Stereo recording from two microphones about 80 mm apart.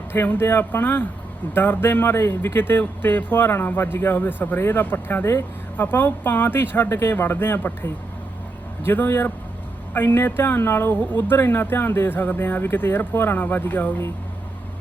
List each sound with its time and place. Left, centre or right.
0.1 s speech: left